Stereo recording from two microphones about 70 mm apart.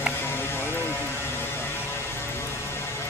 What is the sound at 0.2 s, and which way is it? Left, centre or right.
Music, left.